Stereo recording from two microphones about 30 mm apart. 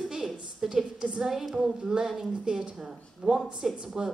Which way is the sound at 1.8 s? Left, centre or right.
Right.